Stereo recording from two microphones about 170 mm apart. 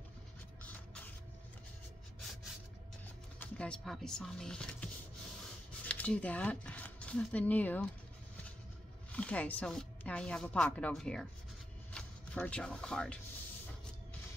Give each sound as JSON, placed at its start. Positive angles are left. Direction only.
{"t": 3.3, "sound": "a woman's voice", "side_deg": 5}
{"t": 5.9, "sound": "speech", "side_deg": 10}
{"t": 9.1, "sound": "a woman's voice", "side_deg": 10}